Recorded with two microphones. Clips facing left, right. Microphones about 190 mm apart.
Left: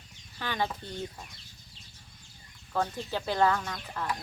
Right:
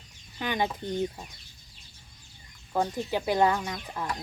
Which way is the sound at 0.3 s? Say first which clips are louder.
Right 3 dB; 15° right (ahead or behind).